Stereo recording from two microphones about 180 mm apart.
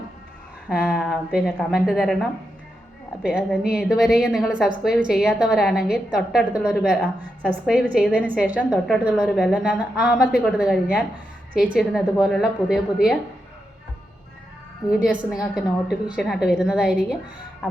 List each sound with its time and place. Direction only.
0.7 s a woman's voice: 5° right (ahead or behind)
15.0 s a woman's voice: 5° right (ahead or behind)
17.6 s beatboxing: 5° left (ahead or behind)